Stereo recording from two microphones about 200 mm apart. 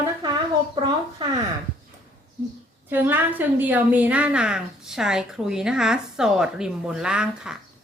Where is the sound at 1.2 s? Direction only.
25° right (ahead or behind).